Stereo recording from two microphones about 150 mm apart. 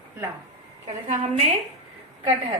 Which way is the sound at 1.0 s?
50° right (ahead or behind).